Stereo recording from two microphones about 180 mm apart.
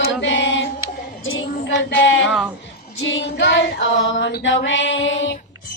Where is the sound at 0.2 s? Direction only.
90° left.